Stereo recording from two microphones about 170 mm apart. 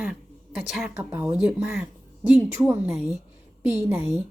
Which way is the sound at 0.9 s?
15° right (ahead or behind).